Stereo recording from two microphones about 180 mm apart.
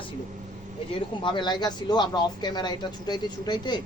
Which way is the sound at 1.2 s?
25° left (ahead or behind).